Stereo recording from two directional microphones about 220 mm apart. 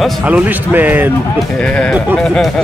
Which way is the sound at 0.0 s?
5° right (ahead or behind).